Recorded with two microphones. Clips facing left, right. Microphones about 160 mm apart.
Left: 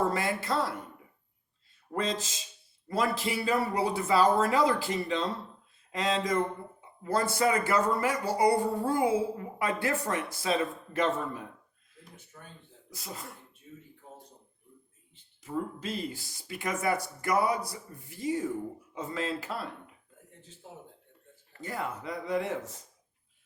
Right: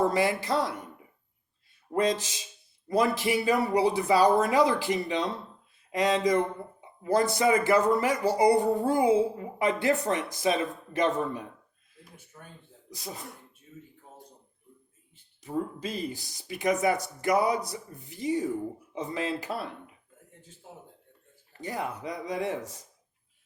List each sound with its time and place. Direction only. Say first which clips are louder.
0.0 s speech: right 4 dB; 15° right (ahead or behind)
2.0 s speech: right 6 dB; 15° right (ahead or behind)
15.1 s speech: right 3 dB; 15° right (ahead or behind)
21.6 s speech: right 2 dB; 20° right (ahead or behind)